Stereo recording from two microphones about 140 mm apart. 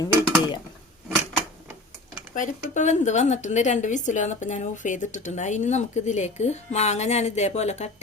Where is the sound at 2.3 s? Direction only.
65° left (ahead or behind).